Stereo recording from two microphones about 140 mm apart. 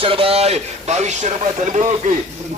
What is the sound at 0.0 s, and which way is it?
A man's voice, 40° right (ahead or behind).